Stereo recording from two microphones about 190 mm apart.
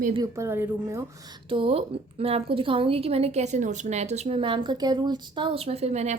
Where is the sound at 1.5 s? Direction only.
30° right (ahead or behind).